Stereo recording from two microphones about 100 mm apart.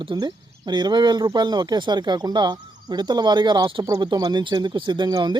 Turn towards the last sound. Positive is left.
turn(degrees=-45)  # may be behind; listen again after turning